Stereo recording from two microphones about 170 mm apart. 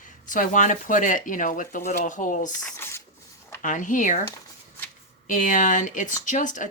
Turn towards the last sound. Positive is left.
turn(degrees=50)  # may be behind; listen again after turning